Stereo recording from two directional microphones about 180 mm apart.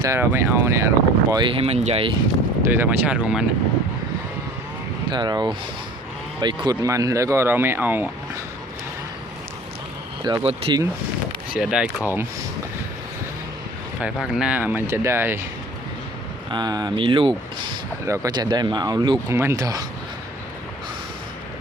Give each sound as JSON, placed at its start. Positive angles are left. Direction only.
{"t": 0.0, "sound": "speech", "side_deg": -15}
{"t": 2.6, "sound": "speech", "side_deg": -10}
{"t": 5.1, "sound": "speech", "side_deg": -25}
{"t": 10.2, "sound": "speech", "side_deg": -30}
{"t": 11.5, "sound": "speech", "side_deg": -5}
{"t": 14.0, "sound": "speech", "side_deg": -5}
{"t": 16.5, "sound": "speech", "side_deg": -25}
{"t": 18.0, "sound": "speech", "side_deg": -15}